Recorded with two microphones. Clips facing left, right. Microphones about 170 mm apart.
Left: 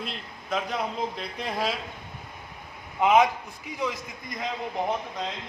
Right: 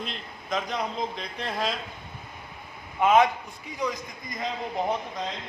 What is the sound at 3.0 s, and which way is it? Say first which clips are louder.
Speech: even; 15° left (ahead or behind).